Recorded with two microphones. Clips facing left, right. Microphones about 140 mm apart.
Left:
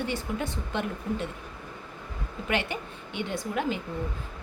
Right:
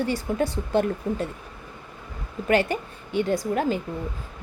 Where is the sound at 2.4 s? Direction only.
40° right (ahead or behind).